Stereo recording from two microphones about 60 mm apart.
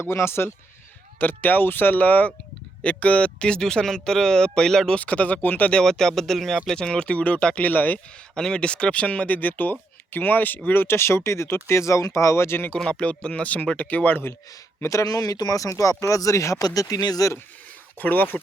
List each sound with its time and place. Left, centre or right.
0.1 s speech: left
1.2 s speech: left; by 4.9 s centre
4.9 s speech: left
5.8 s speech: centre
6.8 s speech: centre
8.4 s speech: centre; by 12.7 s left
12.8 s speech: centre; by 14.3 s left
14.8 s speech: left
18.0 s speech: left